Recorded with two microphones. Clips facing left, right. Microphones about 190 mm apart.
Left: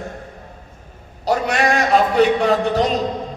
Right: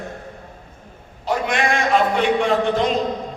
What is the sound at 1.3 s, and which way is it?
A man's voice, 40° left (ahead or behind).